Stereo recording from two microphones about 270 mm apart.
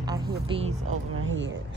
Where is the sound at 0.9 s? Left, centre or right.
Right.